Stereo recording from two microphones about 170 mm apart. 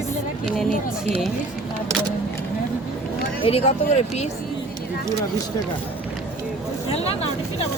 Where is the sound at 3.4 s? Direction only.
35° left (ahead or behind).